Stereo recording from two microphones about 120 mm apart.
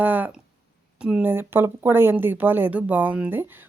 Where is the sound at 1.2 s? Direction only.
20° right (ahead or behind).